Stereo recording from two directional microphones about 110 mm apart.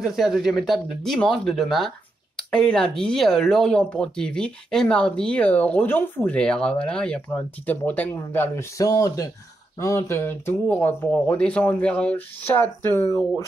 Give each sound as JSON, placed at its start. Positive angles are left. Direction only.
{"t": 0.0, "sound": "speech", "side_deg": -5}
{"t": 8.7, "sound": "speech", "side_deg": 35}
{"t": 12.9, "sound": "speech", "side_deg": 30}